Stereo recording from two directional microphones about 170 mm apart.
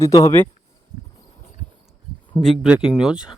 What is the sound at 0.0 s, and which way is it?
Speech, 20° left (ahead or behind).